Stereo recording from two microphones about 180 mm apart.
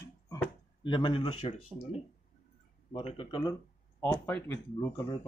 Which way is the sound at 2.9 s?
35° left (ahead or behind).